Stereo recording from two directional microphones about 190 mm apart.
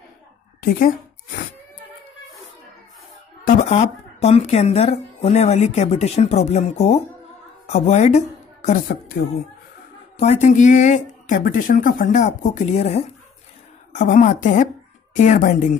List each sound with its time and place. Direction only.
0.6 s a sound: 50° left (ahead or behind)
3.4 s a woman's voice: 35° left (ahead or behind)
10.1 s a woman's voice: 35° left (ahead or behind)